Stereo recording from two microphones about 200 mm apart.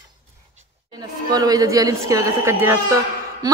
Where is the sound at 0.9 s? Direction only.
20° right (ahead or behind).